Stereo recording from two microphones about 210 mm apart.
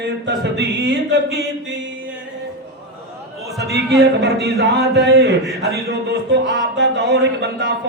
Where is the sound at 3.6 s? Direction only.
55° right (ahead or behind).